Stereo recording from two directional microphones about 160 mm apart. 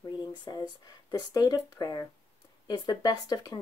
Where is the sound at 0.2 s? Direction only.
25° left (ahead or behind).